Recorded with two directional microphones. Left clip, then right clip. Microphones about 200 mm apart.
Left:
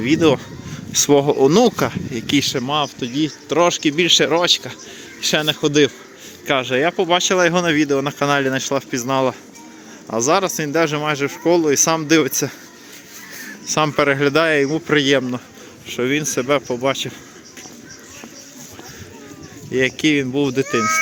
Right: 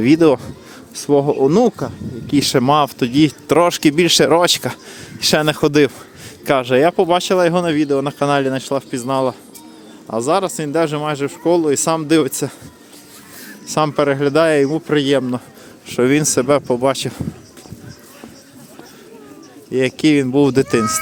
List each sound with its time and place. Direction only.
0.0 s speech: 25° right (ahead or behind)
1.0 s speech: 5° right (ahead or behind)
1.7 s speech: centre (ahead or behind)
2.6 s speech: 40° right (ahead or behind)
6.4 s speech: 30° right (ahead or behind); by 12.5 s 15° right (ahead or behind)
13.7 s speech: 15° right (ahead or behind)
15.9 s speech: 30° right (ahead or behind)
19.7 s speech: 20° right (ahead or behind)